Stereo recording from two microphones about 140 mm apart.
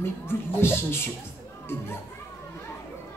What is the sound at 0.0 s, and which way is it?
Speech, 15° left (ahead or behind).